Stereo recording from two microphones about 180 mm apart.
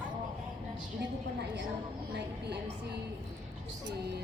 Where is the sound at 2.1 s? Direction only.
65° right (ahead or behind).